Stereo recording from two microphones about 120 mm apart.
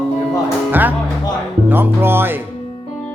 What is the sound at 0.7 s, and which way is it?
Speech, 15° right (ahead or behind).